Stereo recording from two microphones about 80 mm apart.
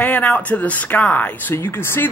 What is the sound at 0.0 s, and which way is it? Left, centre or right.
Speech, centre.